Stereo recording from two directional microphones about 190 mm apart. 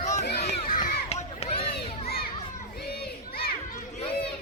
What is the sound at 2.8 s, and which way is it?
Crowd, 55° left (ahead or behind).